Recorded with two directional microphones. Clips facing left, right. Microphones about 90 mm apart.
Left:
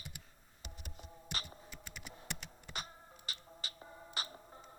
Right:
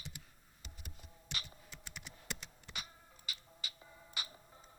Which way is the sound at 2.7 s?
40° left (ahead or behind).